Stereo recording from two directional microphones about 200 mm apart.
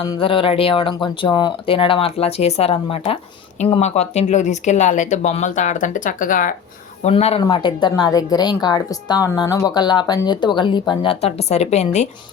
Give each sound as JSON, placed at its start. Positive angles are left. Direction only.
{"t": 0.0, "sound": "speech", "side_deg": 25}
{"t": 7.0, "sound": "speech", "side_deg": 30}